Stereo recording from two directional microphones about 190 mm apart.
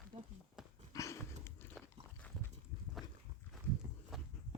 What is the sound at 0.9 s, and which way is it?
Dog, 15° left (ahead or behind).